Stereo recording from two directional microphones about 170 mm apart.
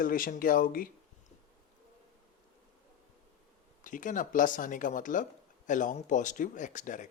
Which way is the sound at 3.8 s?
50° left (ahead or behind).